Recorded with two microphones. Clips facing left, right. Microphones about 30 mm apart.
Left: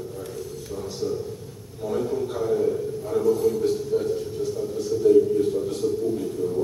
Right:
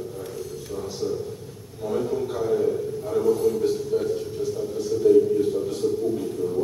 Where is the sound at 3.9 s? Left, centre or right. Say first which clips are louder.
Even; centre.